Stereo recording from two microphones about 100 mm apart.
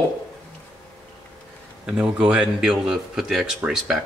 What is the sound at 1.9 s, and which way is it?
Speech, 10° right (ahead or behind).